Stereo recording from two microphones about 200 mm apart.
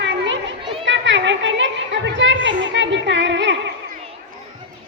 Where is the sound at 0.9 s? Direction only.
65° right (ahead or behind).